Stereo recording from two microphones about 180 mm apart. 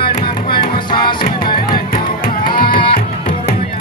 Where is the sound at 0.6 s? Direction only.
25° left (ahead or behind).